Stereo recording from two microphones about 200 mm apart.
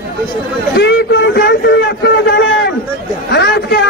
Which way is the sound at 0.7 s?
60° left (ahead or behind).